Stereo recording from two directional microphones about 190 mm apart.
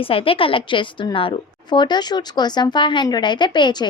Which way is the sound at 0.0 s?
30° left (ahead or behind).